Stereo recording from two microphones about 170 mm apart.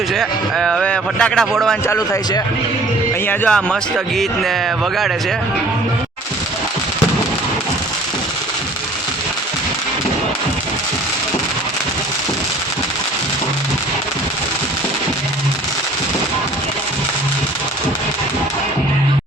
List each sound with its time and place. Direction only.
0.1 s a man's voice: centre (ahead or behind)
1.9 s a man's voice: 20° left (ahead or behind)
3.2 s speech: 5° left (ahead or behind)